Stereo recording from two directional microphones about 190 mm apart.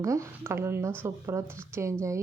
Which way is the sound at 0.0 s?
15° right (ahead or behind).